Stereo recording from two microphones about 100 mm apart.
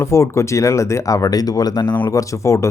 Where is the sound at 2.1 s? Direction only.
30° left (ahead or behind).